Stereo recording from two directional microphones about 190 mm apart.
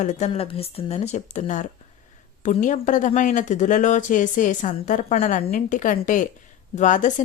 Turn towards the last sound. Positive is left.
turn(degrees=40)  # may be behind; listen again after turning